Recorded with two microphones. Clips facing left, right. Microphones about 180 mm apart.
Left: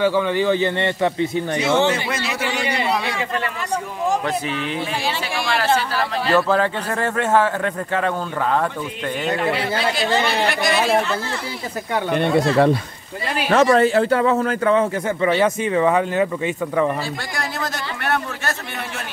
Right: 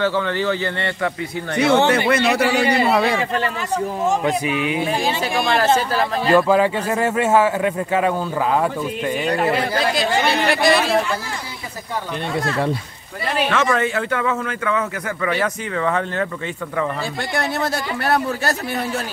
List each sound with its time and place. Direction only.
0.0 s speech: 15° left (ahead or behind)
1.6 s speech: 60° right (ahead or behind)
2.7 s speech: 50° right (ahead or behind)
4.2 s a man's voice: 10° right (ahead or behind)
9.4 s speech: 45° right (ahead or behind)
11.9 s speech: 65° left (ahead or behind)
13.5 s a man's voice: 35° left (ahead or behind); by 16.3 s 15° left (ahead or behind)
17.4 s speech: 30° right (ahead or behind)